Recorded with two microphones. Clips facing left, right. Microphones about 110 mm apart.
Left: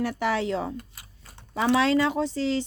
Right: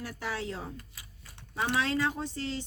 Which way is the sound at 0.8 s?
50° left (ahead or behind).